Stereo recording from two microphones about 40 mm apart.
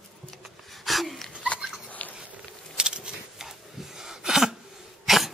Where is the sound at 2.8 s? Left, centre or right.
Right.